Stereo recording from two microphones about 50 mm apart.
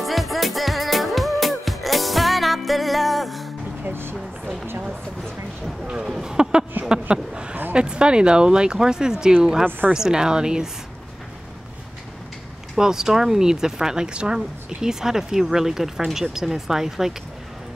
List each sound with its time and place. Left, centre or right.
0.0 s music: centre
3.8 s a sound: right
5.9 s a sound: centre
7.7 s speech: centre
9.7 s a woman's voice: right
9.9 s speech: centre
12.7 s speech: centre